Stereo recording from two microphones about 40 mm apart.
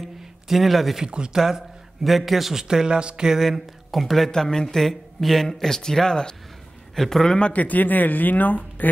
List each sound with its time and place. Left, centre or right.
0.0 s a sound: centre
0.9 s speech: right
1.3 s speech: centre
2.7 s speech: right
3.3 s speech: centre
4.3 s speech: centre
7.3 s a man's voice: left
7.6 s speech: left